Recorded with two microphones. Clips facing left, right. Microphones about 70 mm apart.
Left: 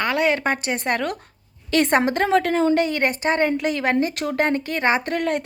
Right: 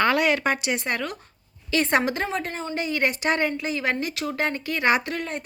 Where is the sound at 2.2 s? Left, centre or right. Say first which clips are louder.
Left 10 dB; left.